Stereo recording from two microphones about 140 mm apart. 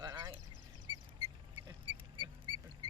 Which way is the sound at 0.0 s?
30° right (ahead or behind).